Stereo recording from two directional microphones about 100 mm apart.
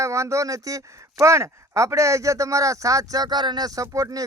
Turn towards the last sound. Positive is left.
turn(degrees=-35)  # may be behind; listen again after turning